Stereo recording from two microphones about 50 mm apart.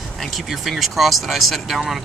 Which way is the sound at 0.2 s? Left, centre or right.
Centre.